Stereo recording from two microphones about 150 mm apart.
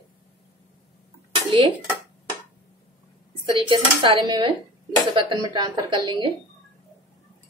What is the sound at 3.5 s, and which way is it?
Speech, 30° right (ahead or behind).